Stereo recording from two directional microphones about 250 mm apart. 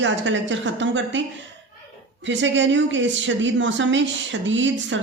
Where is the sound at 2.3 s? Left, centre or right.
Right.